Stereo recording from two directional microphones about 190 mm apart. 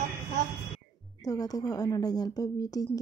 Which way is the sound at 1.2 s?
20° left (ahead or behind).